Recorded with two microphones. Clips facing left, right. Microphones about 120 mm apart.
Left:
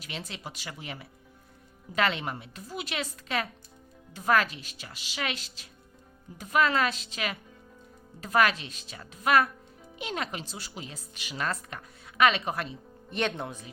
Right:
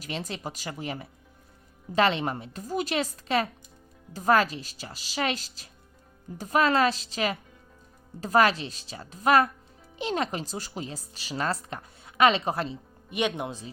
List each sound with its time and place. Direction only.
0.0 s speech: 40° right (ahead or behind)
13.1 s speech: 10° right (ahead or behind)